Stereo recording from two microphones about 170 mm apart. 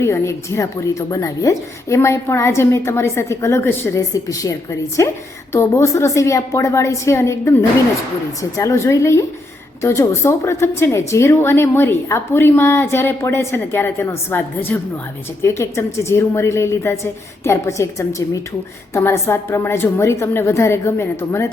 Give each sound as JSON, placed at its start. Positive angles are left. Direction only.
{"t": 0.0, "sound": "a woman's voice", "side_deg": 15}